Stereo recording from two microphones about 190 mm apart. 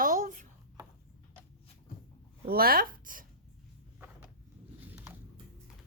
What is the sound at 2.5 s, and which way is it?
Speech, 50° right (ahead or behind).